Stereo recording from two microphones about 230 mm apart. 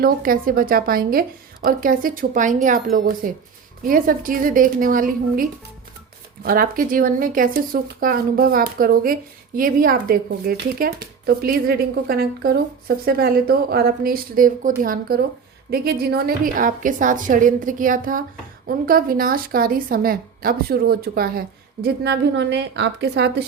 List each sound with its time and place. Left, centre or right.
0.0 s a woman's voice: right